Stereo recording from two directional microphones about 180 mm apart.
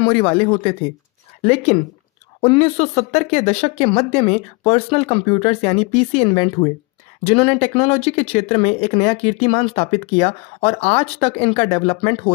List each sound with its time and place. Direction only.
0.0 s speech: 30° left (ahead or behind)